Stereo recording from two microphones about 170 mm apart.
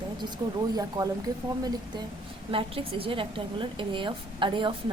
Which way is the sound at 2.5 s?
30° right (ahead or behind).